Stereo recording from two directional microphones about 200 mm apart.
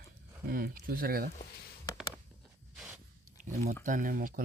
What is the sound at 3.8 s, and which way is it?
Speech, 40° right (ahead or behind).